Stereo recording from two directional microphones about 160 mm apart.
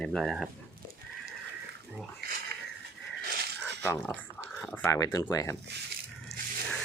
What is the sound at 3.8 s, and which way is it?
Speech, 10° left (ahead or behind).